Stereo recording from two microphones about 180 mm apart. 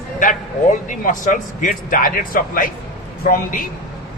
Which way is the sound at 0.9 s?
45° left (ahead or behind).